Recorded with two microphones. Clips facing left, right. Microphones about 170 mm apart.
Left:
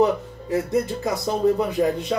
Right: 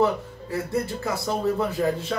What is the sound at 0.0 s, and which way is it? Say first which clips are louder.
Speech: left 3 dB; 20° left (ahead or behind).